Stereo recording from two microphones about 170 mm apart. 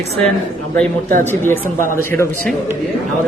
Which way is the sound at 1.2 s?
10° left (ahead or behind).